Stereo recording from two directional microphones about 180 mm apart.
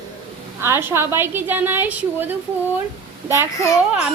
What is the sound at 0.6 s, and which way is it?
A child's voice, 15° right (ahead or behind).